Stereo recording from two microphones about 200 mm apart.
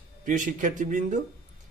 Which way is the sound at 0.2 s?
40° right (ahead or behind).